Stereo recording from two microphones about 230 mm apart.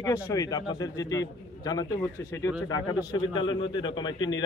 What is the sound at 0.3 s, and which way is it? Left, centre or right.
A man's voice, centre.